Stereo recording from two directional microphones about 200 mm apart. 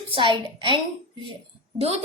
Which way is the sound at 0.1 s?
25° right (ahead or behind).